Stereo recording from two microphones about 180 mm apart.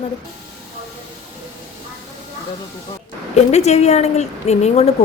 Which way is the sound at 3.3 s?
40° left (ahead or behind).